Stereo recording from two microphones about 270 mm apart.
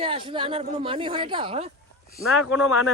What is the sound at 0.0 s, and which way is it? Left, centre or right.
Speech, centre.